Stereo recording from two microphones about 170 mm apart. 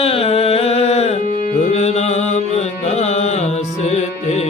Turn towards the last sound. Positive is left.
turn(degrees=40)  # may be behind; listen again after turning